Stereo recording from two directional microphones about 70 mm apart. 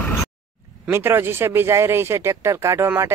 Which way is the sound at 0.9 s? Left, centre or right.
Right.